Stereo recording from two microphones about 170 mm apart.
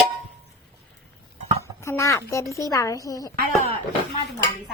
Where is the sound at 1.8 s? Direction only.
15° left (ahead or behind).